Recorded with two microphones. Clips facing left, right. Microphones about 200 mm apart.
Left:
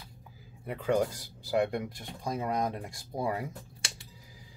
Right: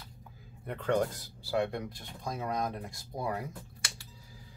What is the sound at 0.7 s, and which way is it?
Speech, 5° left (ahead or behind).